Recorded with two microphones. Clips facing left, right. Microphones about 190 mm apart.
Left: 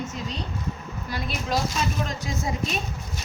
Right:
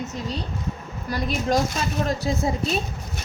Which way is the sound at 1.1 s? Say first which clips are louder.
Right 7 dB; 45° right (ahead or behind).